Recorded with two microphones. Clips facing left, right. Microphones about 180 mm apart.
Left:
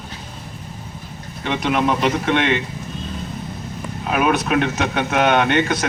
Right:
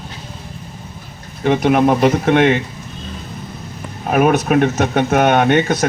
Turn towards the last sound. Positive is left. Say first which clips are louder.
# right 4 dB
turn(degrees=-40)  # may be behind; listen again after turning